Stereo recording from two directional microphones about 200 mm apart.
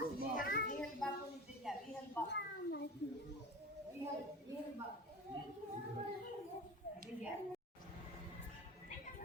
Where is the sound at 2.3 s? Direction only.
60° left (ahead or behind).